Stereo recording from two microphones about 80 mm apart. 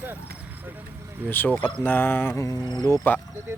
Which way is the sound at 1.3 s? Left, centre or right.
Left.